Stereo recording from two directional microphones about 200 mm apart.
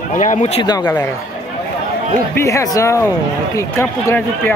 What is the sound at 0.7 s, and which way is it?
Speech, 15° left (ahead or behind).